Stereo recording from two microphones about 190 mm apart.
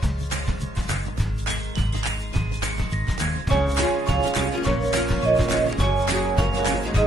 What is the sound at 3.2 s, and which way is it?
Music, centre (ahead or behind).